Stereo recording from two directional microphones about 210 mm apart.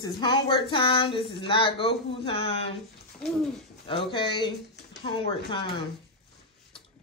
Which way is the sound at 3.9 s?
25° left (ahead or behind).